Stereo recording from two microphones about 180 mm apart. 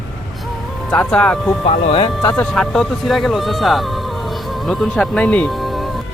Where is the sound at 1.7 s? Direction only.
25° left (ahead or behind).